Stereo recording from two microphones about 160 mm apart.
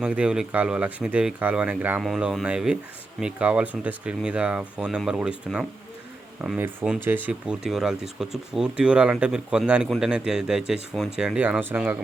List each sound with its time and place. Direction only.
0.0 s speech: 5° right (ahead or behind)
6.4 s speech: 5° right (ahead or behind)